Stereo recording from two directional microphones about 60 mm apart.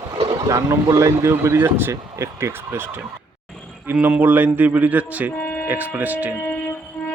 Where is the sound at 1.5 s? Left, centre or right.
Right.